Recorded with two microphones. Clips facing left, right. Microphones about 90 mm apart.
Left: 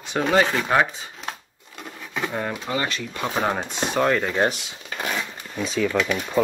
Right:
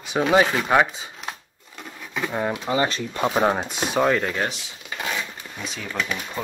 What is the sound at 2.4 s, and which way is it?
Speech, 20° right (ahead or behind).